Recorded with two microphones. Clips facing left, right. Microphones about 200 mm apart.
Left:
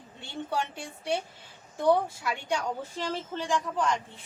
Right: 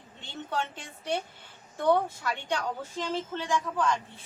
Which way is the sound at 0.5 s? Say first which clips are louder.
Even; 10° left (ahead or behind).